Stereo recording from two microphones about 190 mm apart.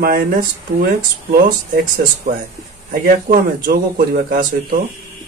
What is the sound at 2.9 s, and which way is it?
Speech, 50° right (ahead or behind).